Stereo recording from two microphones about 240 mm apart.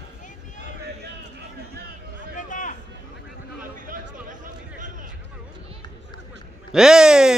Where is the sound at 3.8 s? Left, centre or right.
Right.